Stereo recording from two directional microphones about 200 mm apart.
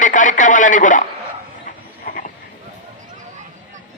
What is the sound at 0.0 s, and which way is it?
A man's voice, 40° left (ahead or behind).